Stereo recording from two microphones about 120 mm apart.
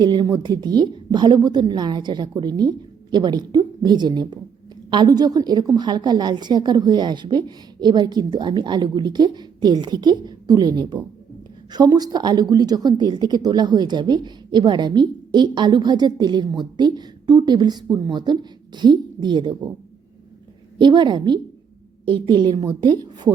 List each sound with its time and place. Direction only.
0.0 s speech: 40° right (ahead or behind)
20.7 s speech: 40° right (ahead or behind)